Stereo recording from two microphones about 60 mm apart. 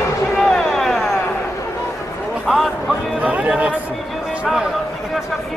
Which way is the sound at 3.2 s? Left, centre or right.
Right.